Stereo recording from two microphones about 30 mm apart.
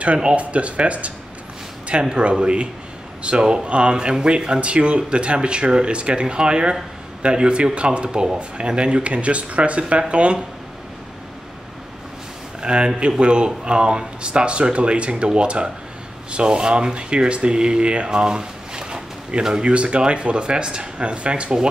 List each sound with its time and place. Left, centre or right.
0.2 s speech: right
3.6 s speech: right
3.9 s speech: right
12.6 s speech: right